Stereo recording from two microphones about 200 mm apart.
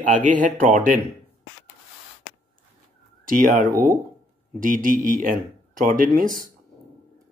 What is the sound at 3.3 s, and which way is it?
Speech, 45° right (ahead or behind).